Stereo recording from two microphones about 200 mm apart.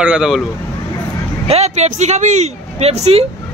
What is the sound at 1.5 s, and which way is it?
Speech, 35° right (ahead or behind).